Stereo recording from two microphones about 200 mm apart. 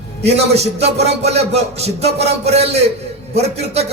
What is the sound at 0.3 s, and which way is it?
A man's voice, 30° right (ahead or behind).